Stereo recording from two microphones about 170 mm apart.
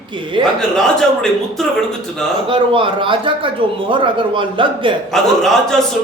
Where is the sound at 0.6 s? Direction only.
5° left (ahead or behind).